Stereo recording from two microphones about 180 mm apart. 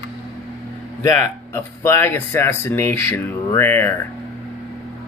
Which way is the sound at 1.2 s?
15° left (ahead or behind).